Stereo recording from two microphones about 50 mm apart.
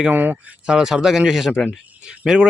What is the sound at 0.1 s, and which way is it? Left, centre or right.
Speech, right.